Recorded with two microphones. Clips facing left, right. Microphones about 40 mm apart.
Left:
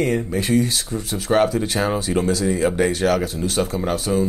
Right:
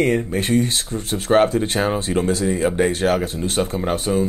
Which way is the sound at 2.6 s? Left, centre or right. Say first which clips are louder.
Right 1 dB; centre.